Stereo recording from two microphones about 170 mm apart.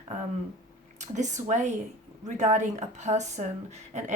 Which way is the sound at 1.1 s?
45° right (ahead or behind).